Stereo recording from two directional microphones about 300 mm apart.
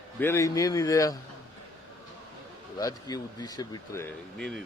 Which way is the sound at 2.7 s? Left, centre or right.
Centre.